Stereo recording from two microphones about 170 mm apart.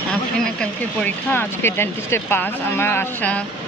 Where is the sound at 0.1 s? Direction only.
5° left (ahead or behind).